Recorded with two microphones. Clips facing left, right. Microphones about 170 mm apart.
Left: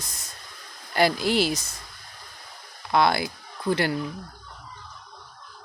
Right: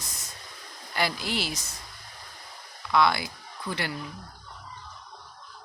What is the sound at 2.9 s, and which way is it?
Speech, 45° left (ahead or behind).